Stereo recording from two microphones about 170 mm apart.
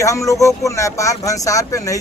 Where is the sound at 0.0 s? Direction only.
20° left (ahead or behind).